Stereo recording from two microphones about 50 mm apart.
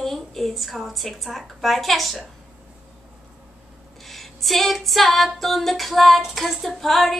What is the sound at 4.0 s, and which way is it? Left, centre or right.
Female singing, centre.